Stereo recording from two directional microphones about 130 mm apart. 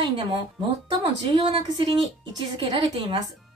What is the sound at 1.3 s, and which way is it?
A woman's voice, 35° right (ahead or behind).